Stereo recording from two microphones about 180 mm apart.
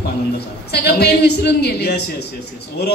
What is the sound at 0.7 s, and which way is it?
A woman's voice, 65° left (ahead or behind).